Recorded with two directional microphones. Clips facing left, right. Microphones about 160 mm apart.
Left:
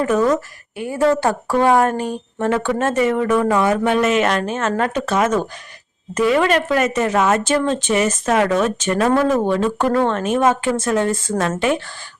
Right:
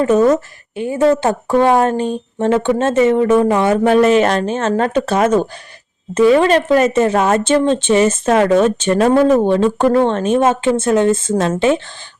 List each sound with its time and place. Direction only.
0.0 s speech: 25° right (ahead or behind)